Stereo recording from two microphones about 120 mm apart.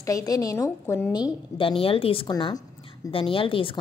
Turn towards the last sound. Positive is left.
turn(degrees=45)  # may be behind; listen again after turning